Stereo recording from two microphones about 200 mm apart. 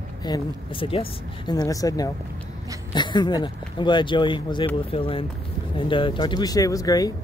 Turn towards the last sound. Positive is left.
turn(degrees=15)  # may be behind; listen again after turning